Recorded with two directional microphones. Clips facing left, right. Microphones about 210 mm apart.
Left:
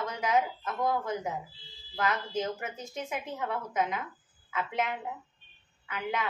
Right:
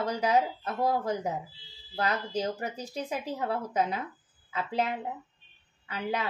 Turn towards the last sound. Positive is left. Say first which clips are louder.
# right 1 dB
turn(degrees=-35)  # may be behind; listen again after turning